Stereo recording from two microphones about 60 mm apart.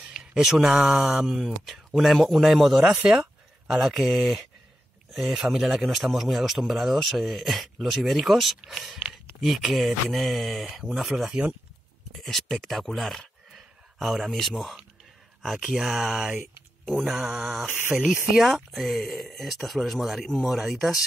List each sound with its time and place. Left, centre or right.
0.2 s speech: centre
0.7 s speech: centre
16.3 s a sound: right
17.0 s mantra: centre
18.3 s speech: centre